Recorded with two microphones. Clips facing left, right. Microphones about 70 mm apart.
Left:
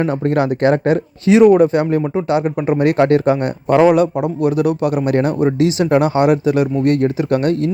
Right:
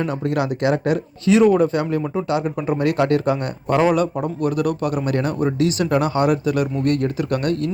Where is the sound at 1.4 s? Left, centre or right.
Left.